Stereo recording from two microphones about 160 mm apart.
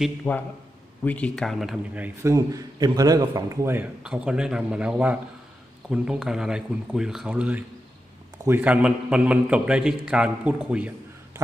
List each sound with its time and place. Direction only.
0.3 s a man's voice: 10° left (ahead or behind)
2.2 s a man's voice: 20° right (ahead or behind)
4.0 s a man's voice: 5° right (ahead or behind)